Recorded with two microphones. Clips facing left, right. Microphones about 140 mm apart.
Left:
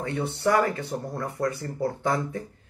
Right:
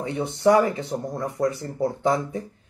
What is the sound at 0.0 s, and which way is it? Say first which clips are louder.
A man's voice: right 5 dB; 20° right (ahead or behind).